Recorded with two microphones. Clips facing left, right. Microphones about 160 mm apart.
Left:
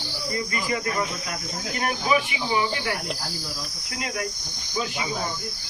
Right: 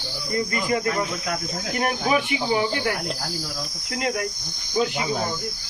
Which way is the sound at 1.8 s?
50° right (ahead or behind).